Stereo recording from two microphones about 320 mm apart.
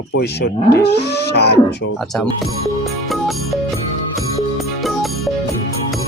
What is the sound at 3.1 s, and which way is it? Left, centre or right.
Music, centre.